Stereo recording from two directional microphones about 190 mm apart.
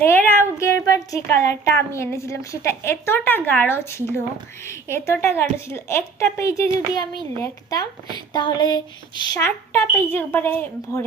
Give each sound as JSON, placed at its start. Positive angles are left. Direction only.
{"t": 0.0, "sound": "speech", "side_deg": 10}